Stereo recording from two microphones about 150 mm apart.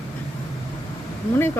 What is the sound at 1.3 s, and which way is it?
Speech, 15° left (ahead or behind).